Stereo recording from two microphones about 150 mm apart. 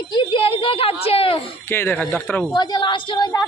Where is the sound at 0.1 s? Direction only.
30° left (ahead or behind).